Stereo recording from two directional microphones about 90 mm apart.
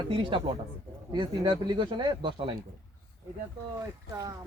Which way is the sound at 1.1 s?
60° right (ahead or behind).